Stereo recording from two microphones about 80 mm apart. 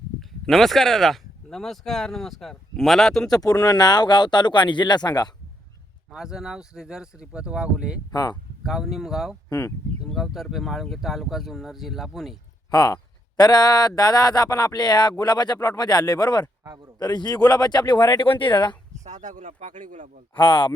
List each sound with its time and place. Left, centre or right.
0.2 s speech: centre
3.3 s speech: left
6.1 s speech: centre
8.1 s speech: left
8.6 s speech: centre
9.5 s speech: left
10.0 s speech: centre
12.7 s speech: left
15.5 s speech: left
16.6 s a man's voice: right
17.0 s speech: left
20.3 s speech: left